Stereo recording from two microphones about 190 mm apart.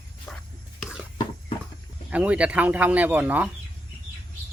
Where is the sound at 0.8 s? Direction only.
5° right (ahead or behind).